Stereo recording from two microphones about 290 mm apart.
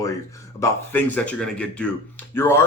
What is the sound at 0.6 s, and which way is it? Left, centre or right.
Speech, centre.